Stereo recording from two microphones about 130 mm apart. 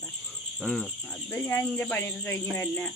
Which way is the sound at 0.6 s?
Centre (ahead or behind).